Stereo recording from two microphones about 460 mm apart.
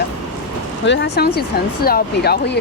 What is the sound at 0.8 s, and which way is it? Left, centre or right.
Speech, left.